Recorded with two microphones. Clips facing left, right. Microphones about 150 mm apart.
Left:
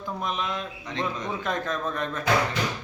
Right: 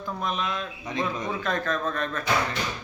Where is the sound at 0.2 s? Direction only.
20° left (ahead or behind).